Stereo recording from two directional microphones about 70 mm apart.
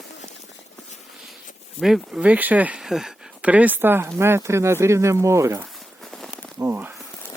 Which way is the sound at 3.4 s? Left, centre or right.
Right.